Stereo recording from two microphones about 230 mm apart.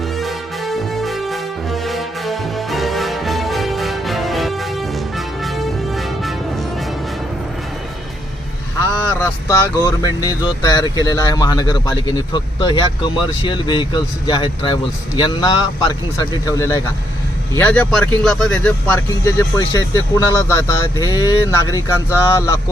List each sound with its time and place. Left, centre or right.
0.2 s music: centre
9.2 s speech: centre